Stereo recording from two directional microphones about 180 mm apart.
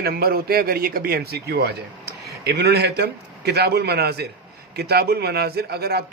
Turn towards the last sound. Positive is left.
turn(degrees=-60)  # may be behind; listen again after turning